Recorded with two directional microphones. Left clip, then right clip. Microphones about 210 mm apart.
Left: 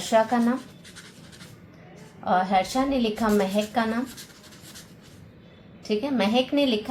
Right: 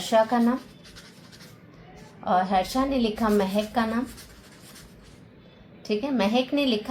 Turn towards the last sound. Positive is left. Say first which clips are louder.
# left 1 dB
turn(degrees=-20)  # may be behind; listen again after turning